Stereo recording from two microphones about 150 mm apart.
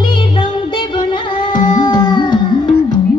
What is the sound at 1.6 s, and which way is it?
Music, 30° left (ahead or behind).